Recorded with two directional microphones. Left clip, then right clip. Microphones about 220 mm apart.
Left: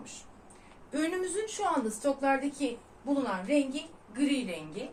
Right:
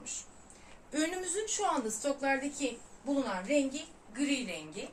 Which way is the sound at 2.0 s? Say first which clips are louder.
Left 4 dB; 25° right (ahead or behind).